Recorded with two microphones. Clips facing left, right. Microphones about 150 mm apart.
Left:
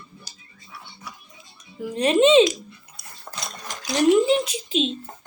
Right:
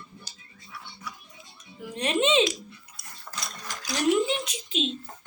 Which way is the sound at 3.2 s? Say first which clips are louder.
Left 3 dB; 25° left (ahead or behind).